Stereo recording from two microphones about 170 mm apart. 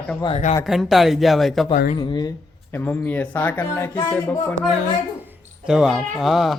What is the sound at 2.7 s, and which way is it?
Speech, 10° left (ahead or behind).